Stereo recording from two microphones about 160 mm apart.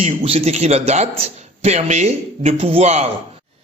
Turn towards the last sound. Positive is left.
turn(degrees=-40)  # may be behind; listen again after turning